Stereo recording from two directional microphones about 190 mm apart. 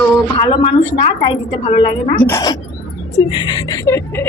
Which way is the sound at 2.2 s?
20° left (ahead or behind).